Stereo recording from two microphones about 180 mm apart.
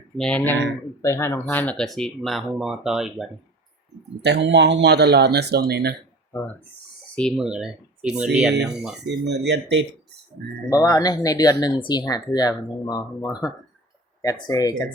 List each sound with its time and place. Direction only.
0.2 s speech: 5° left (ahead or behind)
4.2 s speech: 70° right (ahead or behind)
7.2 s speech: centre (ahead or behind)
9.0 s speech: 70° right (ahead or behind)
10.8 s speech: 20° left (ahead or behind)